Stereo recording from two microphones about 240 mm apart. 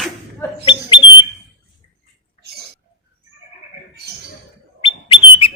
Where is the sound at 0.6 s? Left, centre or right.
Centre.